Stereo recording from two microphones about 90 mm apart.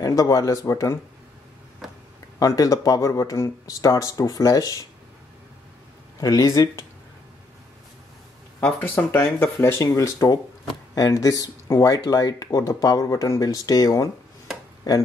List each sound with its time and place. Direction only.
0.0 s speech: 40° left (ahead or behind)
2.3 s speech: 40° left (ahead or behind)
6.2 s speech: 35° left (ahead or behind)
8.8 s speech: 25° left (ahead or behind)